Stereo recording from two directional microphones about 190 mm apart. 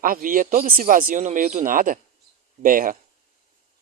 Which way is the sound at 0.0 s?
45° right (ahead or behind).